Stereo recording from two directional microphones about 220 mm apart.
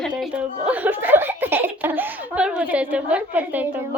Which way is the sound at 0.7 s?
10° right (ahead or behind).